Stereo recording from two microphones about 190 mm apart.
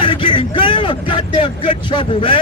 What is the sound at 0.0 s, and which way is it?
Vehicle, 25° left (ahead or behind).